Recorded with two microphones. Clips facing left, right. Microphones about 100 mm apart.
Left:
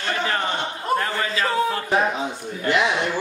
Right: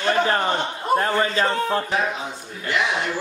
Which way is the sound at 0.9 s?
35° right (ahead or behind).